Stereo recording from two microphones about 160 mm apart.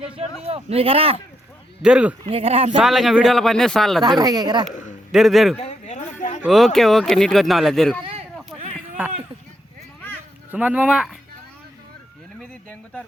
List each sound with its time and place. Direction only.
0.0 s speech: 40° right (ahead or behind)
1.8 s speech: 5° right (ahead or behind)
2.2 s speech: 40° right (ahead or behind)
2.7 s speech: centre (ahead or behind)
4.2 s speech: 25° right (ahead or behind)
5.1 s speech: centre (ahead or behind)
5.5 s a sound: 45° left (ahead or behind)
6.4 s speech: centre (ahead or behind)
10.5 s speech: 10° right (ahead or behind)
12.4 s a sound: 5° left (ahead or behind)